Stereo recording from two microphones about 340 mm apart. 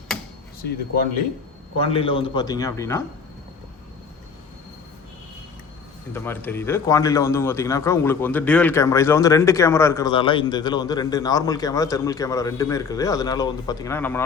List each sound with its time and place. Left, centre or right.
0.6 s speech: left
1.8 s speech: centre
6.1 s speech: centre